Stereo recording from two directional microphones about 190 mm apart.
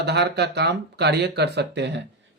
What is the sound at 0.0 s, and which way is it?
Speech, 60° right (ahead or behind).